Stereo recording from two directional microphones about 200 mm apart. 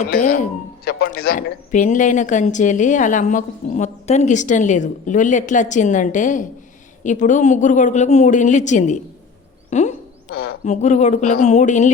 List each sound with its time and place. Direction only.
0.9 s speech: 50° left (ahead or behind)
9.6 s a sound: 35° left (ahead or behind)
10.7 s speech: 35° left (ahead or behind)